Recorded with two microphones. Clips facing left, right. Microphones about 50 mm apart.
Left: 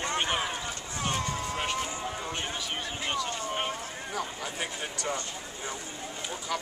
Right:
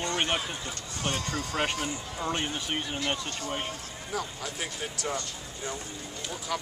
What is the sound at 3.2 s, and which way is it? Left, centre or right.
Speech, left.